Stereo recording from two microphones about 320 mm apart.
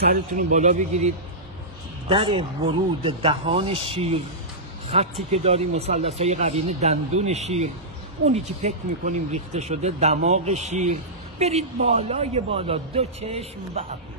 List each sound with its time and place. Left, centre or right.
0.0 s speech: right